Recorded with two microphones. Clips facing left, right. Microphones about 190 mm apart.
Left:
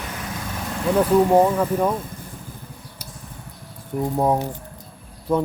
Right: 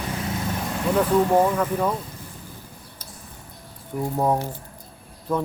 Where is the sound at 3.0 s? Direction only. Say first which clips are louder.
Left 3 dB; 10° left (ahead or behind).